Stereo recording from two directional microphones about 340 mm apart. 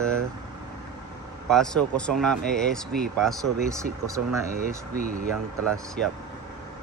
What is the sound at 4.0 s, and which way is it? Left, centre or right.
Speech, centre.